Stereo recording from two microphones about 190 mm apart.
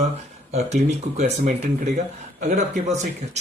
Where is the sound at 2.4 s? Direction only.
40° right (ahead or behind).